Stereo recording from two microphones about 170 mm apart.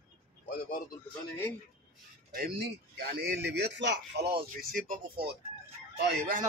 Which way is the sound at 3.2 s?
80° right.